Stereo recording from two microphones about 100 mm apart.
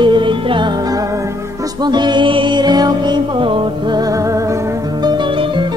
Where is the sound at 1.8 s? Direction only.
45° right (ahead or behind).